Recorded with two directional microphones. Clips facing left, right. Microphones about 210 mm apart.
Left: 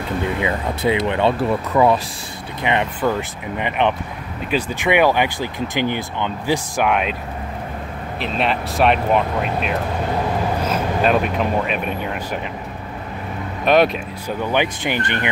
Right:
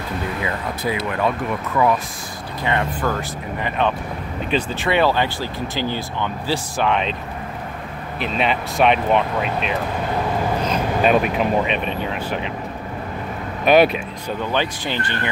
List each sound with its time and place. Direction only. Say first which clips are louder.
0.4 s speech: left 4 dB; 25° left (ahead or behind)
8.2 s speech: even; centre (ahead or behind)
10.6 s vehicle: right 1 dB; 5° left (ahead or behind)
11.2 s speech: right 1 dB; centre (ahead or behind)
13.7 s speech: right 1 dB; 5° right (ahead or behind)
14.4 s speech: left 3 dB; 15° left (ahead or behind)